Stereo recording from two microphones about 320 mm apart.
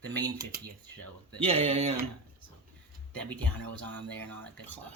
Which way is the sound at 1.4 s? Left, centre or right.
Centre.